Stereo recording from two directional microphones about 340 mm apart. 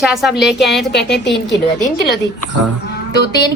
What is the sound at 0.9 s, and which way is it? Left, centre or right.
Speech, left.